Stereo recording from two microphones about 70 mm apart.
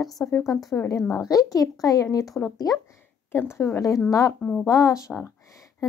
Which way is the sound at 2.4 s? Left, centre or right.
Left.